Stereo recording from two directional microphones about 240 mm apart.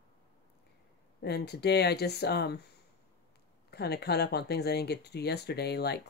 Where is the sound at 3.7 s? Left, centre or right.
Left.